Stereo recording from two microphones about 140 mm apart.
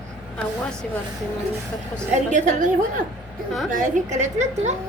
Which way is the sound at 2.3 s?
65° right (ahead or behind).